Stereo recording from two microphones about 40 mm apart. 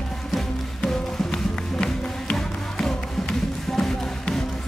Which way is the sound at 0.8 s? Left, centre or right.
Left.